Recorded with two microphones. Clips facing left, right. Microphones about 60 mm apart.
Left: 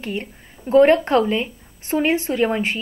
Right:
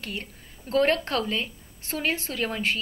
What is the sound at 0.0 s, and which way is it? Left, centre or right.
Speech, centre.